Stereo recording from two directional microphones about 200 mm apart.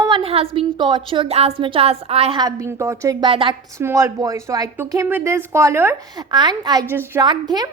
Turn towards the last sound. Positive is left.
turn(degrees=-20)  # may be behind; listen again after turning